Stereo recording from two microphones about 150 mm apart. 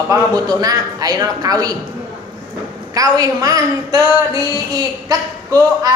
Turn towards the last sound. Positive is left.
turn(degrees=-25)  # may be behind; listen again after turning